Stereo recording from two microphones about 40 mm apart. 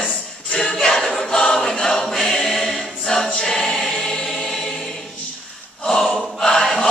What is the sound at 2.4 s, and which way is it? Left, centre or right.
Choir, centre.